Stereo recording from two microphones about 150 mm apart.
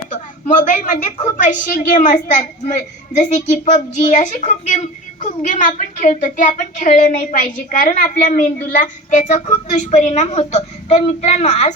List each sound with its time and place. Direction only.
0.6 s a woman's voice: 60° left (ahead or behind)